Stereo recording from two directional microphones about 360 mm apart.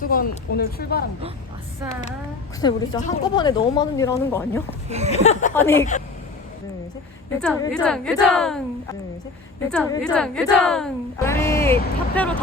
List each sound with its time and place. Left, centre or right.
0.0 s a woman's voice: left
2.6 s a woman's voice: centre
4.9 s speech: centre
5.1 s a woman's voice: centre
7.4 s a woman's voice: centre